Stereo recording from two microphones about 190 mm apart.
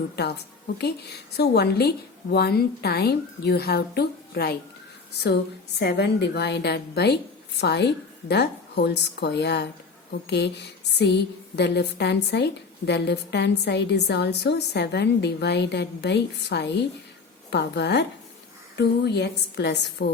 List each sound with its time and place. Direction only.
0.8 s a woman's voice: 60° left (ahead or behind)
5.8 s a woman's voice: 60° left (ahead or behind)